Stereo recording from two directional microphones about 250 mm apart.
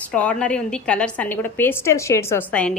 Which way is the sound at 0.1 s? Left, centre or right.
Centre.